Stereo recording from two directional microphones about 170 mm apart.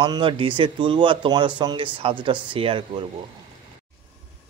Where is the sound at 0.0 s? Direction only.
30° right (ahead or behind).